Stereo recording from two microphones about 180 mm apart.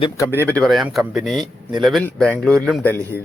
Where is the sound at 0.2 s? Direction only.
10° left (ahead or behind).